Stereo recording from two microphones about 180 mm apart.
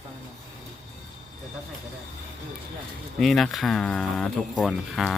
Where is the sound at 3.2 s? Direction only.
Centre (ahead or behind).